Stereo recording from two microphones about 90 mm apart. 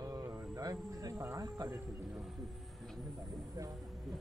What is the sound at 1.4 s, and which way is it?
Speech, 30° right (ahead or behind).